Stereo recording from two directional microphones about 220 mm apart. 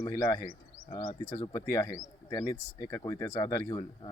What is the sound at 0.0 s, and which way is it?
Speech, 15° left (ahead or behind).